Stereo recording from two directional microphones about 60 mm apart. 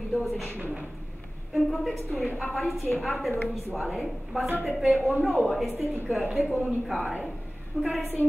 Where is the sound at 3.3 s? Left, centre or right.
Left.